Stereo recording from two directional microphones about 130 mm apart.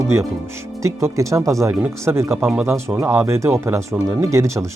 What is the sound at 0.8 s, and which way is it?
Speech, 25° right (ahead or behind).